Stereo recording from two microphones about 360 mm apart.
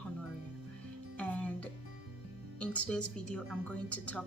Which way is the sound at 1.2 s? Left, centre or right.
Centre.